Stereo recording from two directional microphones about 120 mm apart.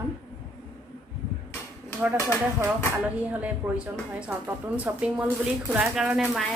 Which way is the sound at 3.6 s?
15° right (ahead or behind).